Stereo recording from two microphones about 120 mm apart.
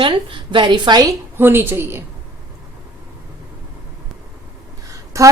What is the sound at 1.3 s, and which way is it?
Speech, 15° right (ahead or behind).